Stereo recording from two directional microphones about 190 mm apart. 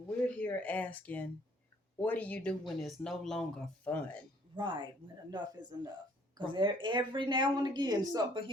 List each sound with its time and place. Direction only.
0.3 s speech: 10° left (ahead or behind)
4.5 s speech: 25° right (ahead or behind)